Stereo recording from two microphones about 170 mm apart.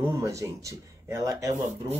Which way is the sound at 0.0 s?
20° right (ahead or behind).